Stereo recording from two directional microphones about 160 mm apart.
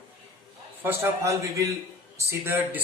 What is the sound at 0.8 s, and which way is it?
Speech, 15° right (ahead or behind).